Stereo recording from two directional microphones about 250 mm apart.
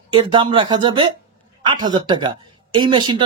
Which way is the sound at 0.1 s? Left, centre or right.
Centre.